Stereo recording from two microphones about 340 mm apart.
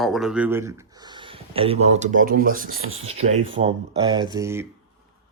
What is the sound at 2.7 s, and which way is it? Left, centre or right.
Speech, right.